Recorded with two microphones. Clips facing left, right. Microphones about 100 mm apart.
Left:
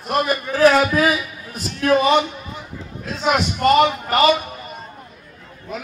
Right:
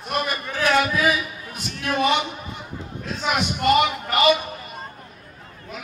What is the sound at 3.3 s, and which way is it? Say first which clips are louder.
Speech: left 4 dB; 35° left (ahead or behind).